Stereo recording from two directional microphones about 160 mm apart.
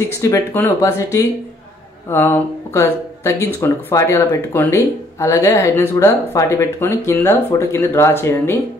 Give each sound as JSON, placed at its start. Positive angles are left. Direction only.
{"t": 0.1, "sound": "speech", "side_deg": 20}